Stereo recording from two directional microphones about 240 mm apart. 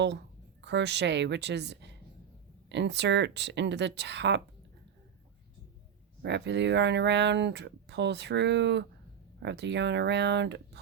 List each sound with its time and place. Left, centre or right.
0.6 s speech: right
6.2 s speech: right